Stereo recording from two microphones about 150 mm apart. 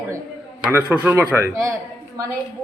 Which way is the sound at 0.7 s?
15° right (ahead or behind).